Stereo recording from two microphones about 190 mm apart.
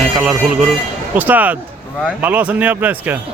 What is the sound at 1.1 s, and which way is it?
Speech, 10° right (ahead or behind).